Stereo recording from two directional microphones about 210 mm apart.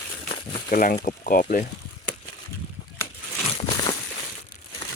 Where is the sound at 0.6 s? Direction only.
40° left (ahead or behind).